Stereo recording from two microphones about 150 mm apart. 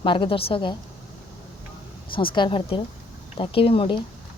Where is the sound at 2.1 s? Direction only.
35° left (ahead or behind).